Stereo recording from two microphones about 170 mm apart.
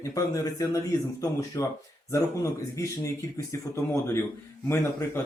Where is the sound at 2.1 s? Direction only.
20° left (ahead or behind).